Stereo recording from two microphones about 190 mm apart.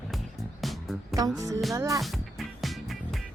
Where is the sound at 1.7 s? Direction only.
15° right (ahead or behind).